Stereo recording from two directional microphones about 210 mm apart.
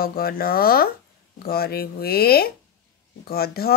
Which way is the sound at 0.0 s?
45° left (ahead or behind).